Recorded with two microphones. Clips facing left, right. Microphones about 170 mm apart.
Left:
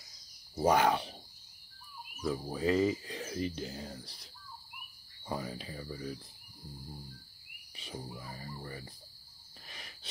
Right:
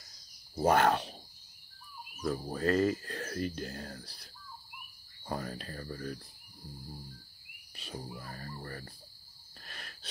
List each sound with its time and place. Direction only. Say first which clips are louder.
0.6 s speech: right 1 dB; 10° left (ahead or behind)
2.2 s speech: even; 5° left (ahead or behind)
5.3 s speech: even; 5° left (ahead or behind)
7.7 s speech: right 1 dB; 15° left (ahead or behind)
8.0 s speech: right 1 dB; 5° left (ahead or behind)
9.7 s wheeze: right 2 dB; 15° left (ahead or behind)